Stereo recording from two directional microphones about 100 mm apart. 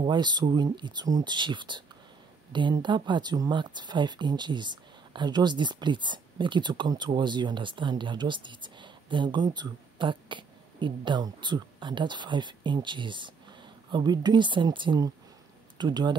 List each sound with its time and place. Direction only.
0.0 s speech: 50° right (ahead or behind)